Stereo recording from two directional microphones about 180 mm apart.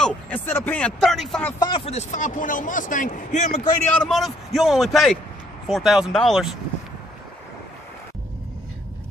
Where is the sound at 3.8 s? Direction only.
Centre (ahead or behind).